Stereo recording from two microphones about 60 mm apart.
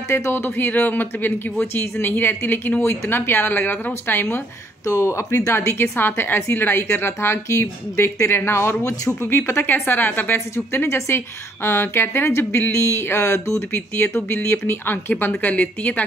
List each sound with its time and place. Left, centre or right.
0.1 s speech: left
4.8 s a woman's voice: left
8.8 s speech: left
9.3 s a woman's voice: left
10.5 s a woman's voice: left
15.5 s a woman's voice: left